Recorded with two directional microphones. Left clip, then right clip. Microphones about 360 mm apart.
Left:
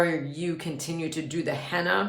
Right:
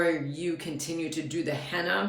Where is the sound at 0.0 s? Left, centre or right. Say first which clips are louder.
Left 1 dB; centre.